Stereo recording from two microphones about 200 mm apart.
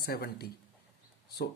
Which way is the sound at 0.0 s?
50° left (ahead or behind).